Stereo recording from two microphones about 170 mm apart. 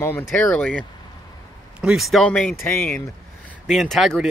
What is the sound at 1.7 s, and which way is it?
Speech, 5° right (ahead or behind).